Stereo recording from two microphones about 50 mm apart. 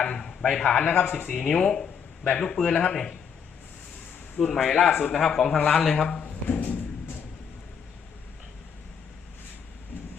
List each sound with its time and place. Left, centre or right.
0.0 s a man's voice: centre
0.8 s speech: left
4.4 s speech: centre
6.1 s a sound: centre